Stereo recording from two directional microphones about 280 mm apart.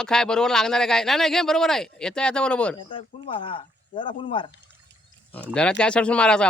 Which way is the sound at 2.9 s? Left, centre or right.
Centre.